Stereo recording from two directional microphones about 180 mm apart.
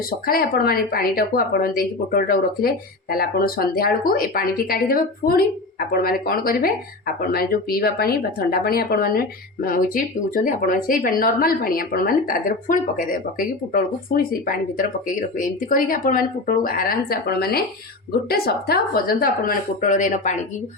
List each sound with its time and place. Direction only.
0.3 s a woman's voice: 55° left (ahead or behind)